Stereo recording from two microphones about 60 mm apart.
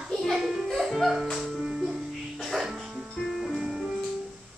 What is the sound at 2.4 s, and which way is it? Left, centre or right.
Music, centre.